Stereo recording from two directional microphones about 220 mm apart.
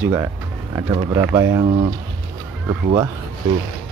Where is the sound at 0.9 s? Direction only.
25° right (ahead or behind).